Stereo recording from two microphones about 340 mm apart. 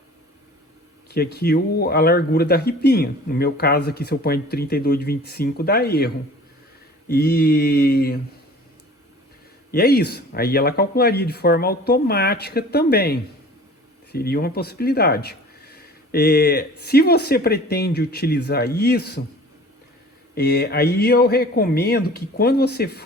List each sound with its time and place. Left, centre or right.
1.1 s speech: left
7.1 s speech: left
9.7 s speech: left
20.3 s speech: left